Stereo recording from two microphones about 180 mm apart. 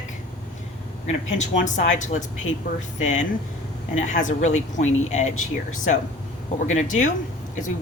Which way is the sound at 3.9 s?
40° left (ahead or behind).